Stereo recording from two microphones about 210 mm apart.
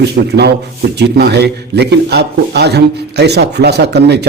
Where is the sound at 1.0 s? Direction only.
50° right (ahead or behind).